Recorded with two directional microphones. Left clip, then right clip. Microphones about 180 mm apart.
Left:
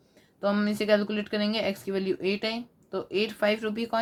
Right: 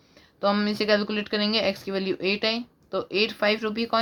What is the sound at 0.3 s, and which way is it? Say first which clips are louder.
Speech: right 3 dB; 35° right (ahead or behind).